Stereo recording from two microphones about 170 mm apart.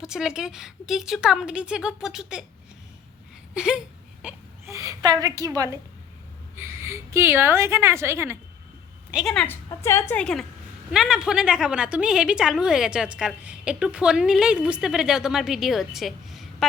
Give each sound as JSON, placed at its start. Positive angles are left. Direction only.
{"t": 0.0, "sound": "a woman's voice", "side_deg": -5}
{"t": 3.5, "sound": "whimper", "side_deg": -5}
{"t": 4.7, "sound": "a woman's voice", "side_deg": -20}
{"t": 9.1, "sound": "a woman's voice", "side_deg": 5}
{"t": 9.6, "sound": "a woman's voice", "side_deg": 15}